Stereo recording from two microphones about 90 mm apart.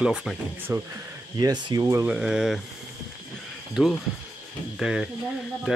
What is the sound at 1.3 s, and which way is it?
Speech, 50° right (ahead or behind).